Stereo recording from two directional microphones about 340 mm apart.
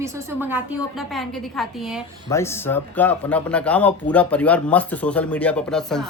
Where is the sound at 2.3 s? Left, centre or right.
Centre.